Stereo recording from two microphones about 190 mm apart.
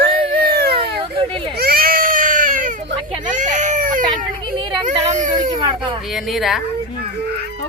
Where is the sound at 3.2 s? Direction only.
40° right (ahead or behind).